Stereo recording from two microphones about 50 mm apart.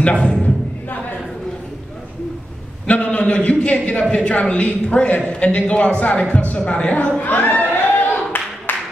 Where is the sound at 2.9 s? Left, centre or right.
Left.